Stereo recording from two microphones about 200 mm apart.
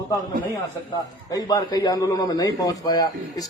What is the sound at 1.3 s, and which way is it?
A man's voice, 20° left (ahead or behind).